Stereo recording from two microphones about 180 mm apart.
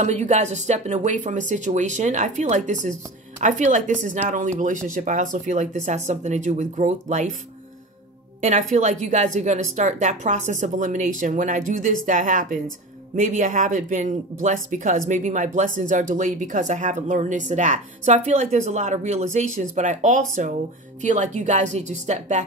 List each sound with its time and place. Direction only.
0.0 s speech: 40° right (ahead or behind)
8.4 s a woman's voice: 45° right (ahead or behind)